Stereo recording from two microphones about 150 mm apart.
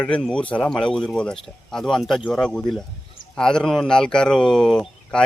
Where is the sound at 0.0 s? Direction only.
5° left (ahead or behind).